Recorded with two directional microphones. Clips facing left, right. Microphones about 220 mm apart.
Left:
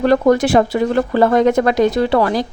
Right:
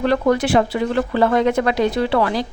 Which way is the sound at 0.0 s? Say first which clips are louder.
Left 4 dB; 45° left (ahead or behind).